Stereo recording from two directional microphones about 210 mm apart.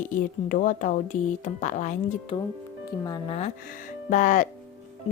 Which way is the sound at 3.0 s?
20° left (ahead or behind).